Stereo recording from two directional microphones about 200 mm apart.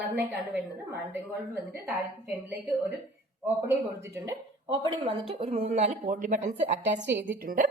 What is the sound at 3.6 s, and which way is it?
Speech, 10° right (ahead or behind).